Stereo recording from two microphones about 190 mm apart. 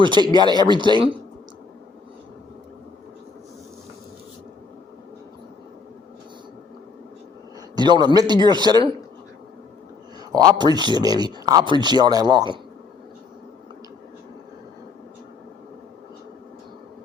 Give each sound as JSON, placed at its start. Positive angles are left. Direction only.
{"t": 0.0, "sound": "speech", "side_deg": -25}
{"t": 7.8, "sound": "speech", "side_deg": -25}
{"t": 10.3, "sound": "speech", "side_deg": -20}